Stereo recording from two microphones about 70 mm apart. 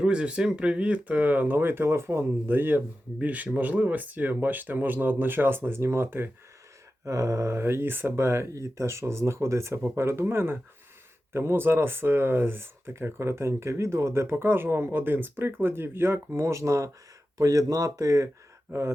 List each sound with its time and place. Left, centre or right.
0.0 s speech: centre; by 6.3 s right
7.0 s speech: right